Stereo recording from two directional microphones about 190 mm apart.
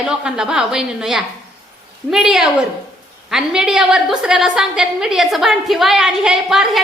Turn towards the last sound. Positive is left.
turn(degrees=0)  # may be behind; listen again after turning